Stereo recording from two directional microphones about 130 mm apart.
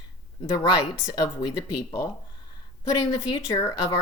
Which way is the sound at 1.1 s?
30° left (ahead or behind).